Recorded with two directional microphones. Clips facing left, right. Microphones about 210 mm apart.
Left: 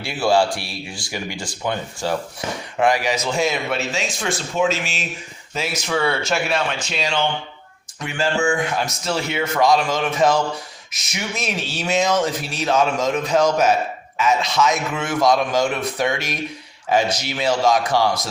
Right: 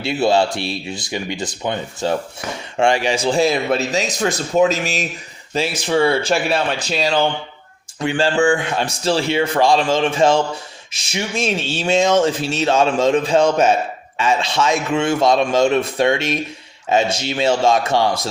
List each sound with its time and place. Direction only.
0.0 s a man's voice: 25° right (ahead or behind)